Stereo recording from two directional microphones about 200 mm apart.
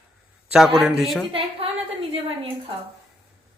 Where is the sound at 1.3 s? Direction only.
25° right (ahead or behind).